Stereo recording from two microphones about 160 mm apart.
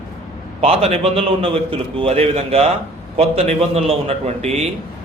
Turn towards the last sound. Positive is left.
turn(degrees=-40)  # may be behind; listen again after turning